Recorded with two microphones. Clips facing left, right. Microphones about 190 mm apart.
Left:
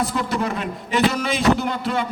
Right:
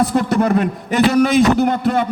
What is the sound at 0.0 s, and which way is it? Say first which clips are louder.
A man's voice: right 7 dB; 50° right (ahead or behind).